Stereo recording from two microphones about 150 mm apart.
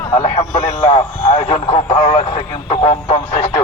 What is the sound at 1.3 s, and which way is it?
Speech, 45° left (ahead or behind).